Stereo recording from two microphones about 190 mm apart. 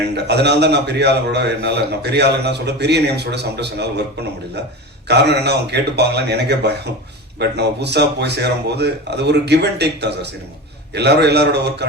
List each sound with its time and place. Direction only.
0.1 s a man's voice: 60° right (ahead or behind)
5.0 s a man's voice: 60° right (ahead or behind)